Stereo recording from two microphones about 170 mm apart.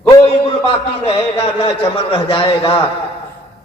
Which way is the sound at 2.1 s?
30° left (ahead or behind).